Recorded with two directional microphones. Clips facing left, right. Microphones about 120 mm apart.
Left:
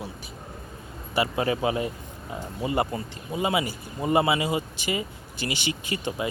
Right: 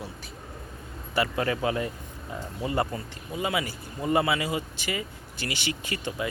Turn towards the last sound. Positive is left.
turn(degrees=20)  # may be behind; listen again after turning